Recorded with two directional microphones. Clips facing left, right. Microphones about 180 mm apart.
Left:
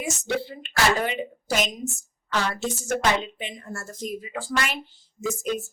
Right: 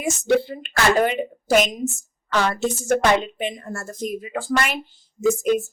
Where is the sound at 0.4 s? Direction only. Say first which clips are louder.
Right 3 dB; 50° right (ahead or behind).